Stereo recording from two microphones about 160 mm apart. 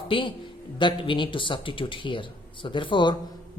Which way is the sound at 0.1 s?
30° left (ahead or behind).